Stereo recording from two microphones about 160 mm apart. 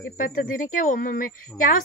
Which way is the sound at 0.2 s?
55° left (ahead or behind).